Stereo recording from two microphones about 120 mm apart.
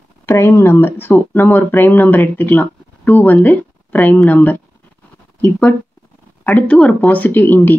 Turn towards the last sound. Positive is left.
turn(degrees=15)  # may be behind; listen again after turning